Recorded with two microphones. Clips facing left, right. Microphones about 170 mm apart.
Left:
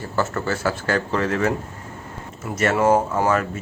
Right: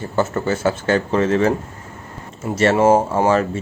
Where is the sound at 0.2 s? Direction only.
20° right (ahead or behind).